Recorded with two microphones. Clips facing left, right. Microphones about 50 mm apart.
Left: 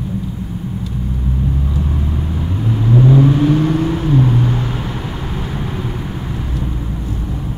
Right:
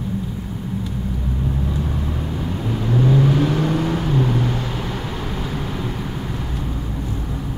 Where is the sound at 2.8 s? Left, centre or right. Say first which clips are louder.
Left 6 dB; centre.